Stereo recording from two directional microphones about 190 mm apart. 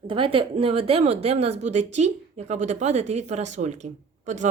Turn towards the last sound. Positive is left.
turn(degrees=-40)  # may be behind; listen again after turning